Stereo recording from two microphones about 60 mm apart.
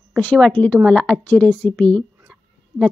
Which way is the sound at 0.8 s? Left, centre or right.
Centre.